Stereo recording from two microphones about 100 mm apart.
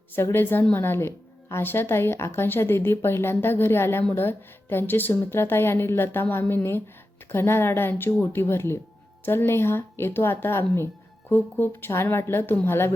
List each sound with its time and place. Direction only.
0.2 s speech: 25° left (ahead or behind)